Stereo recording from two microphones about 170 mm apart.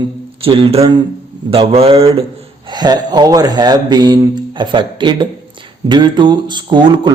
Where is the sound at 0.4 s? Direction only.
35° right (ahead or behind).